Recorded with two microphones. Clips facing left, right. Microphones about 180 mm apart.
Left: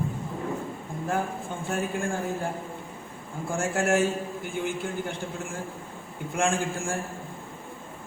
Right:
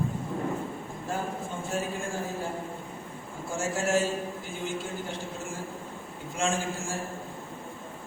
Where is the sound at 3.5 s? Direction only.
55° left (ahead or behind).